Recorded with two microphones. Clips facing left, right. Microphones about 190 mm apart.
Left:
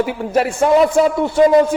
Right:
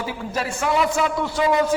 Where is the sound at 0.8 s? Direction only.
40° left (ahead or behind).